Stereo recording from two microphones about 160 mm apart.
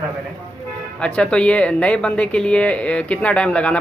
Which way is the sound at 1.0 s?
5° left (ahead or behind).